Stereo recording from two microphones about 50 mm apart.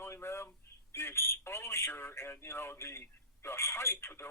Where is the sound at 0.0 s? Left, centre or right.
Left.